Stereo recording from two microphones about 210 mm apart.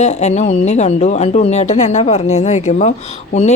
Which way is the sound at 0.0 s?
30° left (ahead or behind).